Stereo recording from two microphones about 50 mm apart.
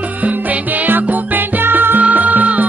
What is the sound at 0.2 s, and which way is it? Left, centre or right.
Music, right.